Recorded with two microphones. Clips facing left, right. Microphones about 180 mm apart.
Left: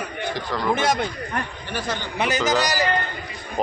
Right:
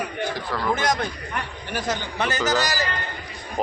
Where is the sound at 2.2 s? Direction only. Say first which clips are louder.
Left 2 dB; 15° left (ahead or behind).